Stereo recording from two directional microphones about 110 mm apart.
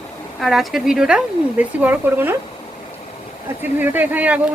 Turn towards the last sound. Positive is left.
turn(degrees=-15)  # may be behind; listen again after turning